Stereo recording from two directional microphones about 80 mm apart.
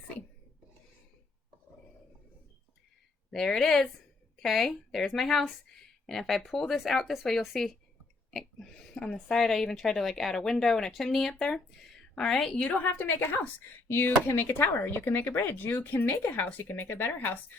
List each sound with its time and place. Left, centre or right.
3.3 s a woman's voice: centre; by 17.3 s left